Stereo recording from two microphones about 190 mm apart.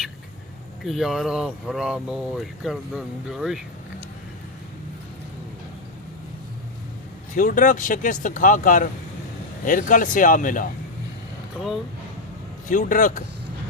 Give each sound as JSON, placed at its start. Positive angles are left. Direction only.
{"t": 0.9, "sound": "speech", "side_deg": 0}
{"t": 7.3, "sound": "speech", "side_deg": 45}
{"t": 12.6, "sound": "speech", "side_deg": 45}